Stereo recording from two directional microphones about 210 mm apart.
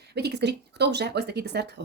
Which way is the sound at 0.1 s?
50° right (ahead or behind).